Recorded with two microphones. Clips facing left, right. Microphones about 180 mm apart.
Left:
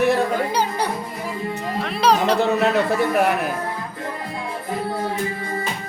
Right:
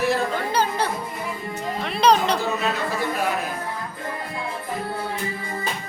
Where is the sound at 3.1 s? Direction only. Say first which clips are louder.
Left 6 dB; 65° left (ahead or behind).